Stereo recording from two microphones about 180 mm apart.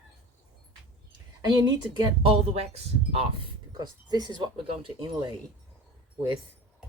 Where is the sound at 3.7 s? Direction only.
25° right (ahead or behind).